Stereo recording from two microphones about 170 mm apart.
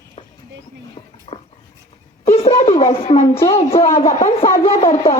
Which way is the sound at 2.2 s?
35° left (ahead or behind).